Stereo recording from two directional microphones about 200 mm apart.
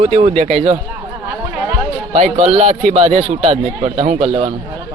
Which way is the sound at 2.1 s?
35° right (ahead or behind).